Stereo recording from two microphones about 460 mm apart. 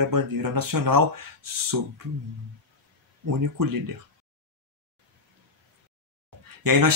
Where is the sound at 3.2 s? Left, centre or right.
Right.